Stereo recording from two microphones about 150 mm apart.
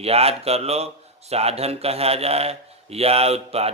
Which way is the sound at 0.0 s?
40° right (ahead or behind).